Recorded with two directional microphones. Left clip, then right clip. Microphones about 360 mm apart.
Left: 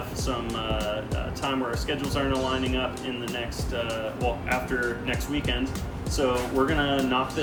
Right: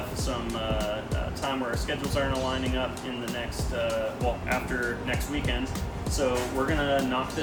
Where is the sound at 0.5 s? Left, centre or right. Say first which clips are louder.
Right 1 dB; centre.